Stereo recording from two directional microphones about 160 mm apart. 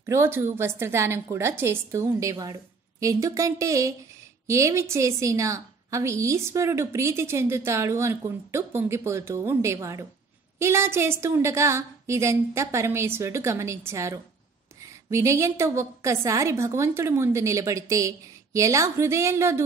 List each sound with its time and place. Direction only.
0.0 s a woman's voice: 15° right (ahead or behind)